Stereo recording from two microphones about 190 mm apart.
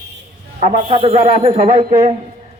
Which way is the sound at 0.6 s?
35° right (ahead or behind).